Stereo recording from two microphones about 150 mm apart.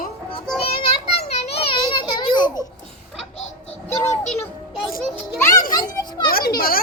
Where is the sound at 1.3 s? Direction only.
45° left (ahead or behind).